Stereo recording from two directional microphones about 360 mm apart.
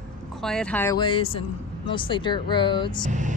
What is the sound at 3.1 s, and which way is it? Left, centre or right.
Speech, right.